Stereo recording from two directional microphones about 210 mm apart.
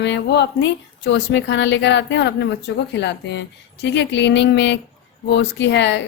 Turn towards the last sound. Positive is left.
turn(degrees=55)  # may be behind; listen again after turning